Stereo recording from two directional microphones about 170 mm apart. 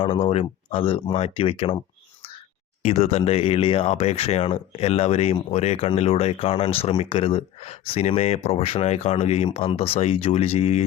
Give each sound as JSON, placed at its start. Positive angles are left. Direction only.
{"t": 0.0, "sound": "speech", "side_deg": 30}
{"t": 2.8, "sound": "speech", "side_deg": 40}